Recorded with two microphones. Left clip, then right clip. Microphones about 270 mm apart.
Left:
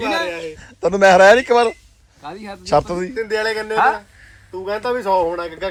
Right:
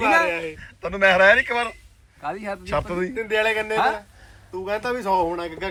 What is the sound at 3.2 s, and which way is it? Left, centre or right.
A man's voice, centre.